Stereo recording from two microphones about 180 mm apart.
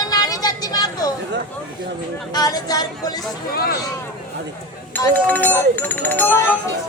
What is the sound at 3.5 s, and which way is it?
Speech, 55° left (ahead or behind).